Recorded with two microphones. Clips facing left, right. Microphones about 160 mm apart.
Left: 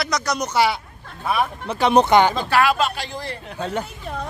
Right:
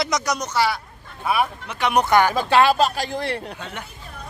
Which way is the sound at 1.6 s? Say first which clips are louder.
Left 6 dB; 30° left (ahead or behind).